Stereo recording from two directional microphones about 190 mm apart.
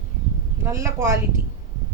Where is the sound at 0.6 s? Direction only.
15° right (ahead or behind).